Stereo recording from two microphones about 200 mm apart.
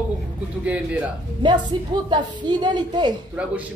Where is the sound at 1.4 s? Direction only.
20° right (ahead or behind).